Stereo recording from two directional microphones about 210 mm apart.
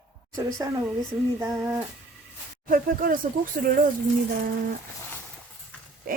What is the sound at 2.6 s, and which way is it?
Speech, 40° right (ahead or behind).